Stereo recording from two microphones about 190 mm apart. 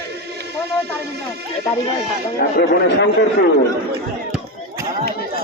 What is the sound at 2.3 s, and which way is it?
Speech, 60° left (ahead or behind).